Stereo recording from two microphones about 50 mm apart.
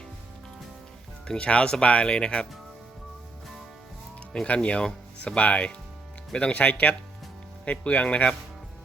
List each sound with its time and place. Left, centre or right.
1.3 s speech: left
4.4 s speech: left